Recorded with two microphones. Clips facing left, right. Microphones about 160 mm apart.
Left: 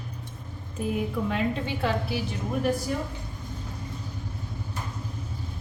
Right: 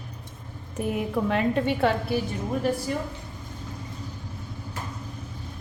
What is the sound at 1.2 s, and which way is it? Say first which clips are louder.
Speech: right 4 dB; 60° right (ahead or behind).